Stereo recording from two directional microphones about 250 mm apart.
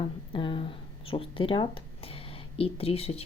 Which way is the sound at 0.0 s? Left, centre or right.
Centre.